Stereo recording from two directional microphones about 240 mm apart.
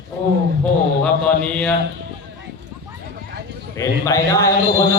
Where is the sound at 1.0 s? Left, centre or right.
Centre.